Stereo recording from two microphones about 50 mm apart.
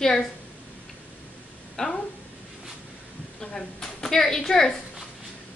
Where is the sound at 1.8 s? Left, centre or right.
Centre.